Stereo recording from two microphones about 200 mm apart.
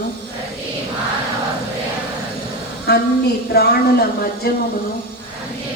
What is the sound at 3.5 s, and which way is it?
Speech, 50° left (ahead or behind).